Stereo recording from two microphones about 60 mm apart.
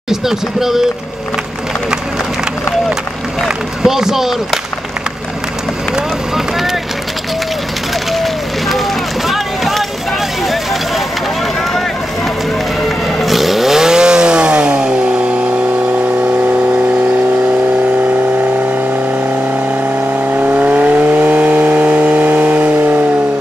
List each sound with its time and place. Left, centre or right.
0.1 s speech: centre
3.4 s run: centre
6.3 s vehicle: centre
8.1 s vehicle: centre
12.8 s chainsaw: centre; by 15.6 s right
20.3 s vehicle: right